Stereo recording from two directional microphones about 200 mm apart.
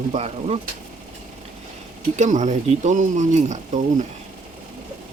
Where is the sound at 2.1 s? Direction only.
35° right (ahead or behind).